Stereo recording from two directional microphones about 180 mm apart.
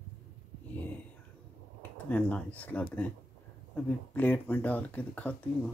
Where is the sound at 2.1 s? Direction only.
10° left (ahead or behind).